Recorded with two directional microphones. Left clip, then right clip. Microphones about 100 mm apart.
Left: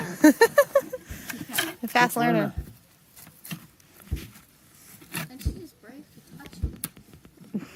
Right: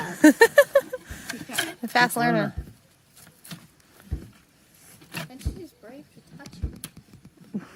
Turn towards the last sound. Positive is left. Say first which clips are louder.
# left 1 dB
turn(degrees=-15)  # may be behind; listen again after turning